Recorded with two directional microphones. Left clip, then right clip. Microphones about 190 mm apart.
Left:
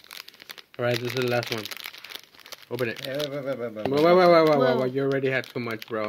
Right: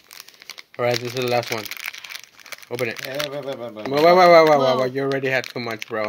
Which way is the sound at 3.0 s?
25° left (ahead or behind).